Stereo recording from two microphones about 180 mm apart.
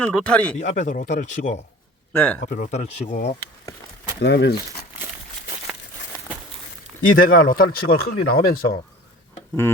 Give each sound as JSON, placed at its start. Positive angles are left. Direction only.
{"t": 0.0, "sound": "speech", "side_deg": 5}
{"t": 0.5, "sound": "speech", "side_deg": 40}
{"t": 2.1, "sound": "speech", "side_deg": 10}
{"t": 2.5, "sound": "speech", "side_deg": 45}
{"t": 4.2, "sound": "speech", "side_deg": 70}
{"t": 7.0, "sound": "speech", "side_deg": 50}